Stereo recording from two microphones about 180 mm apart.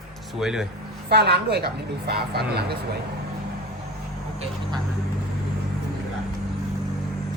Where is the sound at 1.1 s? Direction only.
65° right (ahead or behind).